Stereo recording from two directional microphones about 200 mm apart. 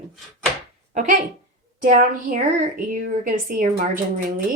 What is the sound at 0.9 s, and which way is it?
Speech, 35° right (ahead or behind).